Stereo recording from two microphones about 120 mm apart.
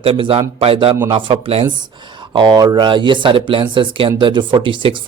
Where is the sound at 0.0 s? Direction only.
50° right (ahead or behind).